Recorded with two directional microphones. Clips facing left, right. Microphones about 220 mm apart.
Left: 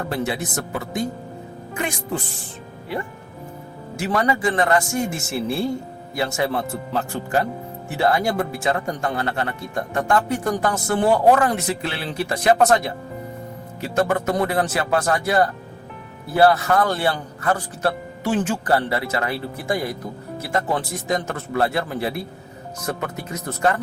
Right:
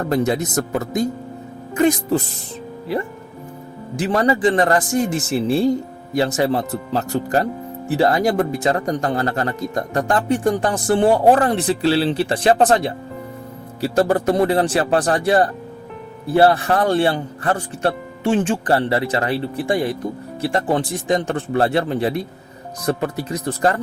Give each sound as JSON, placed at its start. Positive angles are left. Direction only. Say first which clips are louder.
{"t": 0.1, "sound": "speech", "louder": "right 9 dB", "side_deg": -40}
{"t": 3.9, "sound": "a man's voice", "louder": "right 4 dB", "side_deg": -35}